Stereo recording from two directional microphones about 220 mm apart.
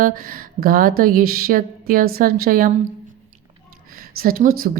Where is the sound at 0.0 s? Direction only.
40° right (ahead or behind).